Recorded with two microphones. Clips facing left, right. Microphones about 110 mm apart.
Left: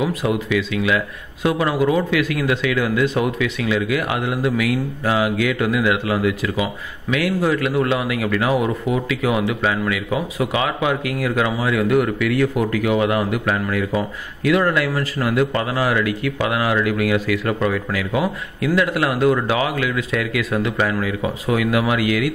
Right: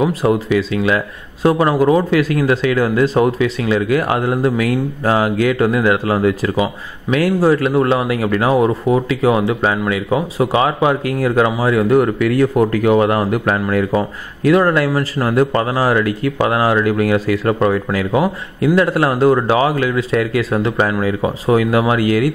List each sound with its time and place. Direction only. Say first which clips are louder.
0.0 s speech: right 5 dB; 35° right (ahead or behind)